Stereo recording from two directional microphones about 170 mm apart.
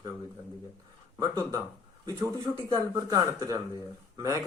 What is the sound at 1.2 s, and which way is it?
A man's voice, 20° right (ahead or behind).